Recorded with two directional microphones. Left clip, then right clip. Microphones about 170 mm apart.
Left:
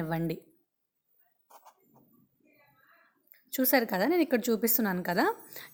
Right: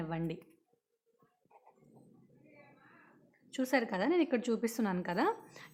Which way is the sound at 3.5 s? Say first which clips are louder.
Left 6 dB; 30° left (ahead or behind).